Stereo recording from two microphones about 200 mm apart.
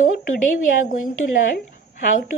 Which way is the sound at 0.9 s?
45° left (ahead or behind).